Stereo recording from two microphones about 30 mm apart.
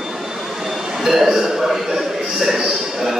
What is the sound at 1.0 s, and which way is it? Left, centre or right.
A man's voice, centre.